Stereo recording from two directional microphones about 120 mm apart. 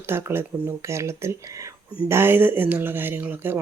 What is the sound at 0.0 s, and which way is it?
Speech, 20° right (ahead or behind).